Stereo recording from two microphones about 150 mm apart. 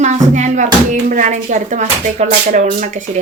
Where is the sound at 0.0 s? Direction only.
50° right (ahead or behind).